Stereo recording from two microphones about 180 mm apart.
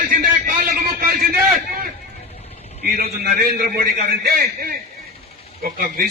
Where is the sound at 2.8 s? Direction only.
55° right (ahead or behind).